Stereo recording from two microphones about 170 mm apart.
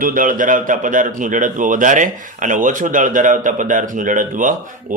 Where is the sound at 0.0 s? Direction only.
55° right (ahead or behind).